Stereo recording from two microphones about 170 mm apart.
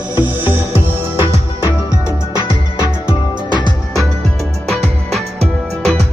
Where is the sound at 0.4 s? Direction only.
35° left (ahead or behind).